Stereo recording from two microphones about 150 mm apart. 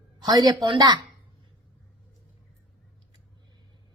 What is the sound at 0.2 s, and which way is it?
Speech, 25° right (ahead or behind).